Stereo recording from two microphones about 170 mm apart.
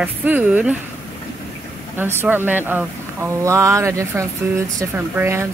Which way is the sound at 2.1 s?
10° right (ahead or behind).